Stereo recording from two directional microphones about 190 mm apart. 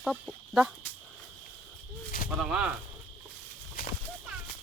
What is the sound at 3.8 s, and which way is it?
Horse, 50° left (ahead or behind).